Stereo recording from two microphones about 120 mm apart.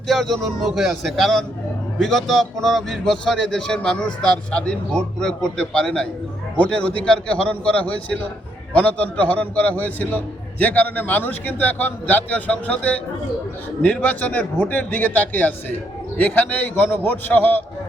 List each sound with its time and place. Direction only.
0.1 s a man's voice: centre (ahead or behind)